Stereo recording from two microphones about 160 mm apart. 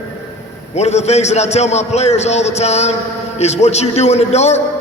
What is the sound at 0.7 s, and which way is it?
A man's voice, 45° left (ahead or behind).